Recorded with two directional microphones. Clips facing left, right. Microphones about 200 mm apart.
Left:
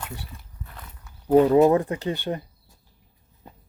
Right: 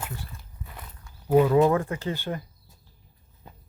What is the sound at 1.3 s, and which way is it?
Speech, 35° left (ahead or behind).